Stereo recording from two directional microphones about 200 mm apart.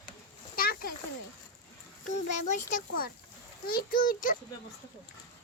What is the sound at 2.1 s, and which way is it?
A child's voice, 35° left (ahead or behind).